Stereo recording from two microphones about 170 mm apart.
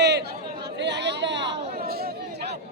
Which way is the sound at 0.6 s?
90° right.